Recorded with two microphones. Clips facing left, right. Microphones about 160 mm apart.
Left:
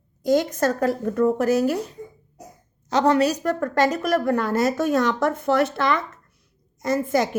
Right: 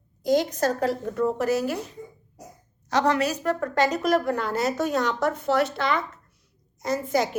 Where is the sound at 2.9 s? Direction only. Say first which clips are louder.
Left 4 dB; 25° left (ahead or behind); by 7.2 s 50° left (ahead or behind).